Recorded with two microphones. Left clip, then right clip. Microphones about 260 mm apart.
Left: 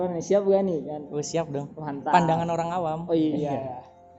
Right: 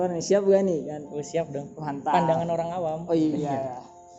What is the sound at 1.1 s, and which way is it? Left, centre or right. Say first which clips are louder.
Speech: left 1 dB; left.